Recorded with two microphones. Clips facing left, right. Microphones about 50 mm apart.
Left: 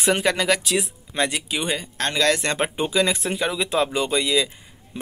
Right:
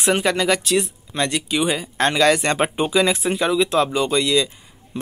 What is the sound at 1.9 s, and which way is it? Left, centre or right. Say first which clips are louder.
Speech: right 5 dB; centre.